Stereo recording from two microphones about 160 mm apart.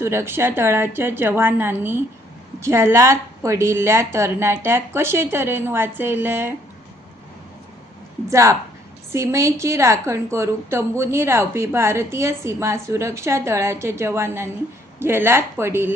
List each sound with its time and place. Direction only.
0.0 s a woman's voice: 15° right (ahead or behind)
8.3 s a woman's voice: 20° right (ahead or behind)